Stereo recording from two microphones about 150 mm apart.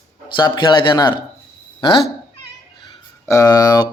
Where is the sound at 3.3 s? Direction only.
25° left (ahead or behind).